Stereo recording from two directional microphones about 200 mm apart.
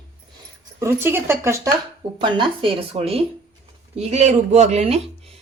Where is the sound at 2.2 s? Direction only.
25° right (ahead or behind).